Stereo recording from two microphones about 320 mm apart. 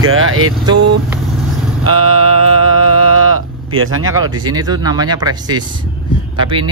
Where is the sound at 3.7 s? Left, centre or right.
Right.